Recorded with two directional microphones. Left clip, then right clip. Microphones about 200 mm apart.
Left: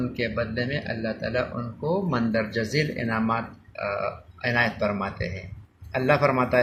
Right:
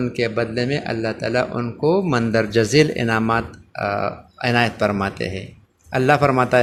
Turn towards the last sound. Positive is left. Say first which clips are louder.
# right 5 dB
turn(degrees=-55)  # may be behind; listen again after turning